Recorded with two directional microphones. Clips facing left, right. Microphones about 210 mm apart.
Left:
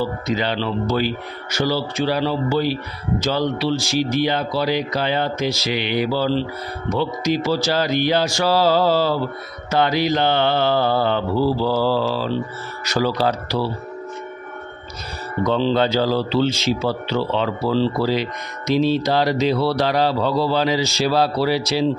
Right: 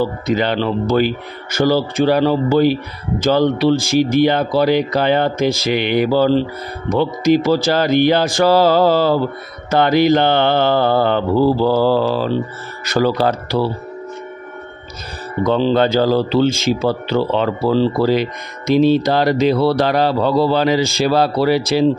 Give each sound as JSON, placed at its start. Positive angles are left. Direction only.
{"t": 0.0, "sound": "speech", "side_deg": -55}
{"t": 15.4, "sound": "speech", "side_deg": -50}